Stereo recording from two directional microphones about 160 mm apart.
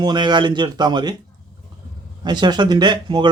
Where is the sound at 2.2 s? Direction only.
25° right (ahead or behind).